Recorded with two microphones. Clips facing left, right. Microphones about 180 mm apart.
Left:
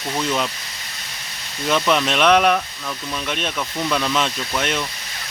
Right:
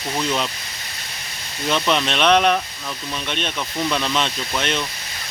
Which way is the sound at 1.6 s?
Centre (ahead or behind).